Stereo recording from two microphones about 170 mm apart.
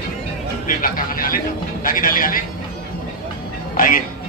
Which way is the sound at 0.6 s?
55° left (ahead or behind).